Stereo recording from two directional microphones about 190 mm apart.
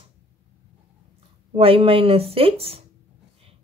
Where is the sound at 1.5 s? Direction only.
30° right (ahead or behind).